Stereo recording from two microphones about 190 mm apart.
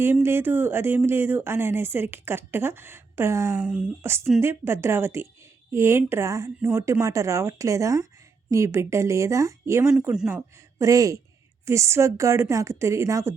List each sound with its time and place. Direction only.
0.0 s speech: 10° right (ahead or behind)
9.9 s speech: 5° right (ahead or behind)